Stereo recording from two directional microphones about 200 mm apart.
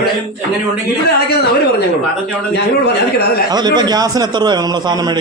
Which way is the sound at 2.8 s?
50° left (ahead or behind).